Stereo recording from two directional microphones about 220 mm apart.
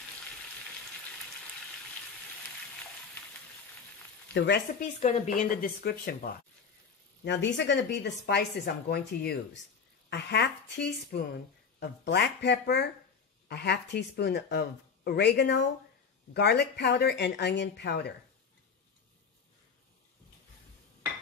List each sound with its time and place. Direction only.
4.3 s speech: 50° left (ahead or behind)
5.0 s speech: 30° left (ahead or behind)
7.2 s speech: 55° left (ahead or behind)